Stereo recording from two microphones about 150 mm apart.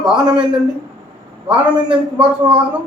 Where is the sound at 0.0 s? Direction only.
5° right (ahead or behind).